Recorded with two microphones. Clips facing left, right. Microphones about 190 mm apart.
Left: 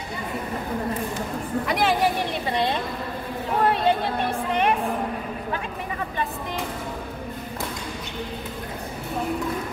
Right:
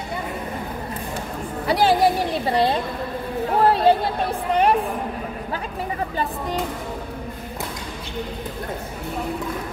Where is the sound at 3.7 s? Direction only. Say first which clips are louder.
Right 5 dB; 35° right (ahead or behind).